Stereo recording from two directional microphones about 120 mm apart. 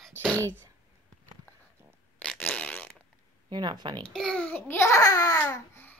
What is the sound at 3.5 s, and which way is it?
Speech, 40° right (ahead or behind).